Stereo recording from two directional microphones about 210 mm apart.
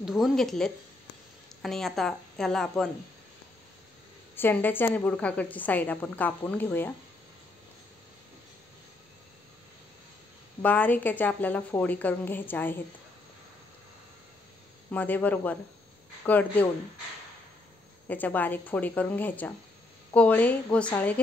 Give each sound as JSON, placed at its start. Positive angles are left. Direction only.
{"t": 0.0, "sound": "a woman's voice", "side_deg": 0}
{"t": 4.4, "sound": "a woman's voice", "side_deg": 10}
{"t": 10.6, "sound": "a woman's voice", "side_deg": 5}
{"t": 14.9, "sound": "a woman's voice", "side_deg": 10}
{"t": 18.0, "sound": "a woman's voice", "side_deg": 10}